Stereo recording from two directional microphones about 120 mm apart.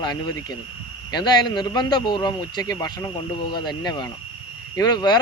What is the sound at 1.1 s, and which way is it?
Speech, 35° left (ahead or behind).